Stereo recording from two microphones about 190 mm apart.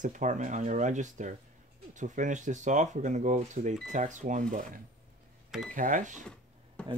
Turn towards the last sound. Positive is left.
turn(degrees=-40)  # may be behind; listen again after turning